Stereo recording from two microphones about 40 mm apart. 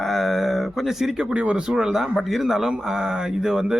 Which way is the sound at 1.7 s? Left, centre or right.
Centre.